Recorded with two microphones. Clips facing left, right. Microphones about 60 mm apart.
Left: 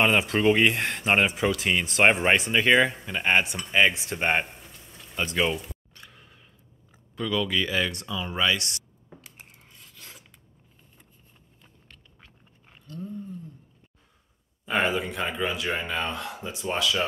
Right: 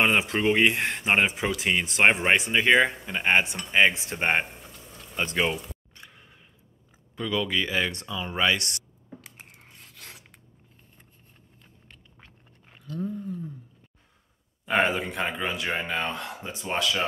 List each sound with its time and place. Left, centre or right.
0.0 s speech: centre
5.5 s a sound: centre
7.2 s speech: centre
8.5 s speech: right
9.7 s filing: right
12.7 s a sound: right
14.7 s speech: right